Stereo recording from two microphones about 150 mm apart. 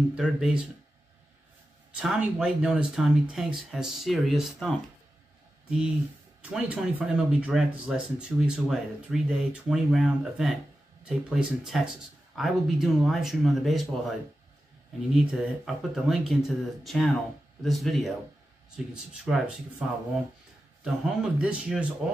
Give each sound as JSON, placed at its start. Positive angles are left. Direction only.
{"t": 0.1, "sound": "speech", "side_deg": -5}
{"t": 2.0, "sound": "speech", "side_deg": -5}
{"t": 6.5, "sound": "speech", "side_deg": -5}
{"t": 15.3, "sound": "speech", "side_deg": 0}
{"t": 19.2, "sound": "speech", "side_deg": 0}